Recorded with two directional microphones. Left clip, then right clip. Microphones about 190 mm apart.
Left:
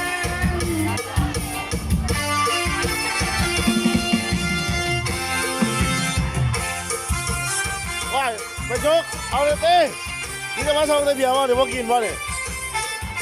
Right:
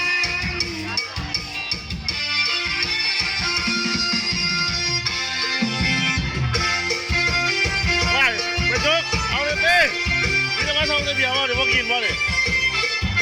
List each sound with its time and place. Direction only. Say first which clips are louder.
8.8 s speech: even; 25° left (ahead or behind)
10.7 s speech: left 3 dB; 35° left (ahead or behind)